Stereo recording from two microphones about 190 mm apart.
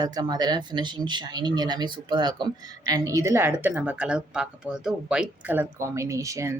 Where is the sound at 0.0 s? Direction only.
20° right (ahead or behind).